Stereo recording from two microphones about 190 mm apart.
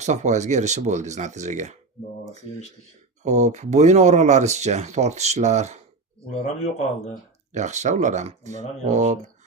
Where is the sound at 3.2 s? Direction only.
35° right (ahead or behind).